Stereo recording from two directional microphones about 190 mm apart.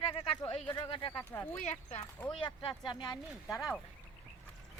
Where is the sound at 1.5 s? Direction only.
35° left (ahead or behind).